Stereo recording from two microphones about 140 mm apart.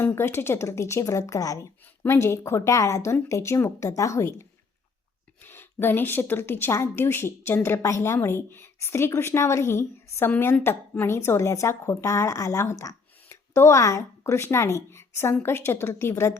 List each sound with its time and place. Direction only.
0.0 s a woman's voice: 15° left (ahead or behind)